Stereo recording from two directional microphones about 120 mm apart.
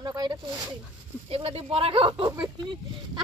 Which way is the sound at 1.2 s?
55° right (ahead or behind).